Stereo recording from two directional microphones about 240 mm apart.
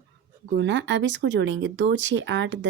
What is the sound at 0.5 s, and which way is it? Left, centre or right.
Speech, right.